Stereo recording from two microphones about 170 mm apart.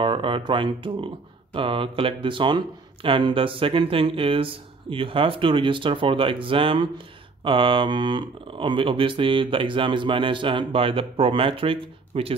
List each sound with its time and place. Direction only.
0.0 s speech: 30° right (ahead or behind)